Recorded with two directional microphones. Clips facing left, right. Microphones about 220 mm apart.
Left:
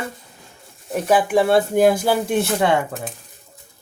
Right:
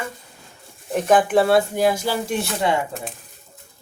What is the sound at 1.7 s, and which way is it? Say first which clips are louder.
Speech: left 4 dB; 55° left (ahead or behind).